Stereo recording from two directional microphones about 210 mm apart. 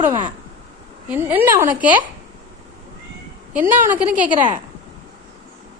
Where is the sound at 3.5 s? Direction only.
10° right (ahead or behind).